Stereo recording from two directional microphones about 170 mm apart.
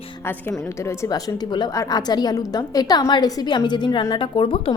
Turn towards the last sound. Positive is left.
turn(degrees=30)  # may be behind; listen again after turning